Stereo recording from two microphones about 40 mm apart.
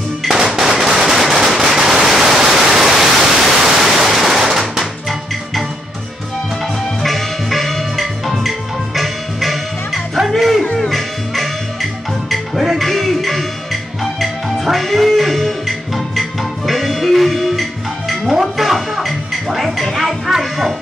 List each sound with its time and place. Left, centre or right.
0.2 s firecracker: centre
7.0 s music: centre